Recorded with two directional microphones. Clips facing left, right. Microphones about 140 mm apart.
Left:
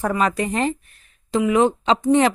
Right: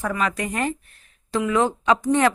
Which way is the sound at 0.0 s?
35° left (ahead or behind).